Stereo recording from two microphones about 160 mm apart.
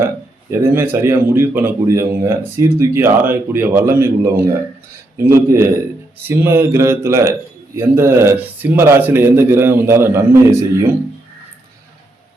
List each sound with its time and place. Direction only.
0.5 s a man's voice: 15° right (ahead or behind)